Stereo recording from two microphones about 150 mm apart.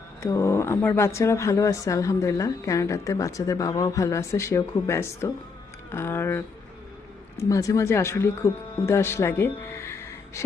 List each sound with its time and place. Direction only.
0.2 s speech: 20° left (ahead or behind)